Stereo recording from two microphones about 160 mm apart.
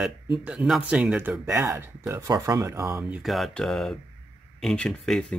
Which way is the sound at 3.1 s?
Centre (ahead or behind).